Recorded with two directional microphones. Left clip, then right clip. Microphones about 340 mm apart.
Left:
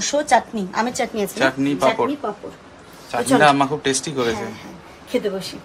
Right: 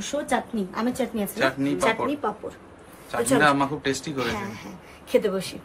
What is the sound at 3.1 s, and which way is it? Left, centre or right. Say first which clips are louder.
Speech: left 5 dB; centre.